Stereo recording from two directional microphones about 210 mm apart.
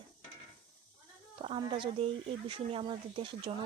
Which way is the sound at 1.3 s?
25° right (ahead or behind).